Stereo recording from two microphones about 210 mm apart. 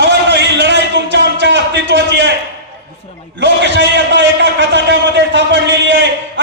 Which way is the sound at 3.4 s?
55° right (ahead or behind).